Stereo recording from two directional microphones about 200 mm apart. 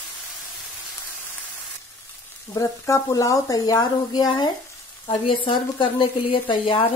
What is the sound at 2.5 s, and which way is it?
A woman's voice, 15° left (ahead or behind).